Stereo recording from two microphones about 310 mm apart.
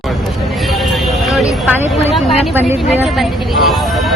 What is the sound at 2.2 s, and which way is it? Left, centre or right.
Speech, centre.